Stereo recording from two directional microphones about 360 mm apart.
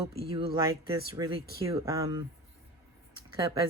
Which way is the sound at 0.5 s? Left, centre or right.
Centre.